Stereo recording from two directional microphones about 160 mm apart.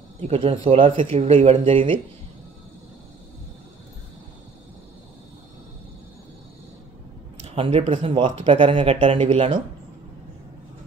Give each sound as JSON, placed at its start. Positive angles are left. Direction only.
{"t": 0.2, "sound": "speech", "side_deg": -35}
{"t": 7.4, "sound": "speech", "side_deg": -35}